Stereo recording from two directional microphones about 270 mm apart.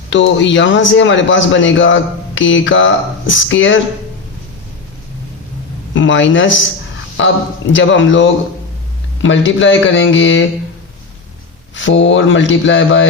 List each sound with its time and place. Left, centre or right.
0.1 s speech: left
5.9 s speech: left
7.7 s speech: left
11.7 s speech: left